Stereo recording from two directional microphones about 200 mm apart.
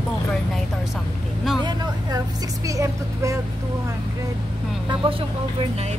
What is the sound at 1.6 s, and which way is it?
A woman's voice, 20° right (ahead or behind).